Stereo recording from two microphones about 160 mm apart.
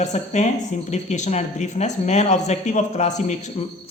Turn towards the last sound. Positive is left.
turn(degrees=45)  # may be behind; listen again after turning